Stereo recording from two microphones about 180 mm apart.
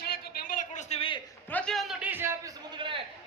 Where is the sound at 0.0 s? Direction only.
50° left (ahead or behind).